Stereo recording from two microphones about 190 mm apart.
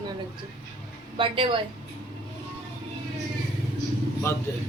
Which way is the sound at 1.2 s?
25° right (ahead or behind).